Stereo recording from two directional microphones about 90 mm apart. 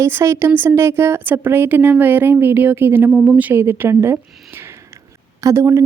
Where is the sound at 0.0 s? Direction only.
30° right (ahead or behind).